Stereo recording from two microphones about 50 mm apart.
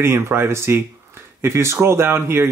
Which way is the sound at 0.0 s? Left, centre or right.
Right.